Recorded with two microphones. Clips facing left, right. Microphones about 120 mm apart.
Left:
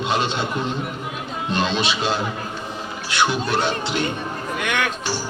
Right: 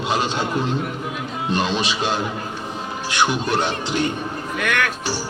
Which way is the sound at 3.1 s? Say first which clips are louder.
Even; 15° right (ahead or behind).